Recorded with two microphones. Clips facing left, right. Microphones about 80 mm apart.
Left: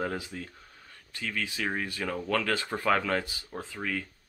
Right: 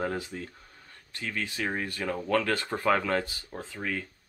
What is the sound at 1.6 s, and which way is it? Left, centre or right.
Speech, centre.